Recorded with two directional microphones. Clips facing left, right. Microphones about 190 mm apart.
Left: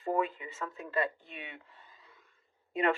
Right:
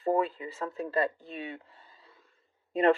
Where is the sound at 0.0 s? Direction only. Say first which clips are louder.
Right 4 dB; 35° right (ahead or behind).